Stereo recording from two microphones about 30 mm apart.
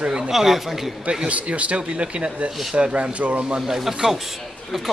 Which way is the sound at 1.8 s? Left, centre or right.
Right.